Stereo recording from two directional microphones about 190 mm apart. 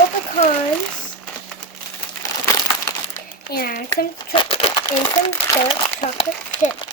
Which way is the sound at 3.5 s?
50° left (ahead or behind).